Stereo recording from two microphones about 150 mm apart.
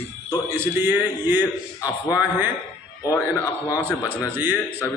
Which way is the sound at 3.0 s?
25° left (ahead or behind).